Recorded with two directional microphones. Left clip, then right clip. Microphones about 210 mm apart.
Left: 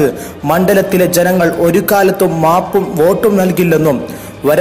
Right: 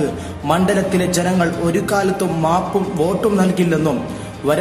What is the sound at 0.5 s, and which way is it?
A man's voice, 30° left (ahead or behind).